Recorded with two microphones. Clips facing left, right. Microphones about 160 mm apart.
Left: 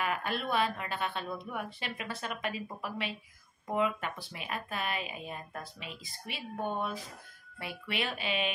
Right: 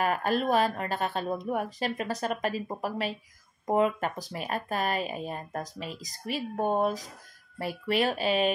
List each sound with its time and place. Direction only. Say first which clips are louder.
0.0 s speech: right 7 dB; 40° right (ahead or behind)